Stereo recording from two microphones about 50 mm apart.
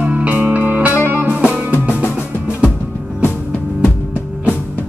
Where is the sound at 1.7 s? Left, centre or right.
Left.